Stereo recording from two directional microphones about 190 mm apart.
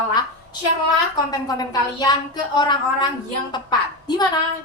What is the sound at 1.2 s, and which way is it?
A woman's voice, 20° left (ahead or behind).